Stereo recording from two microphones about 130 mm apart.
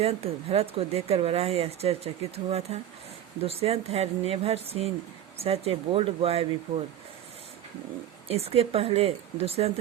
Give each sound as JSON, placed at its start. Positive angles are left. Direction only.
{"t": 0.0, "sound": "speech", "side_deg": -50}
{"t": 8.3, "sound": "speech", "side_deg": -50}